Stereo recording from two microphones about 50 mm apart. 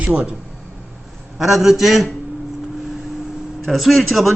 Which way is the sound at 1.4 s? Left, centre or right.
Centre.